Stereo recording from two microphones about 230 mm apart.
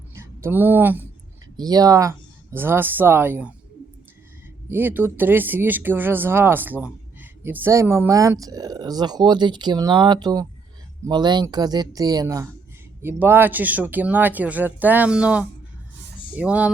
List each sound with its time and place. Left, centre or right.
0.1 s speech: centre
4.7 s speech: centre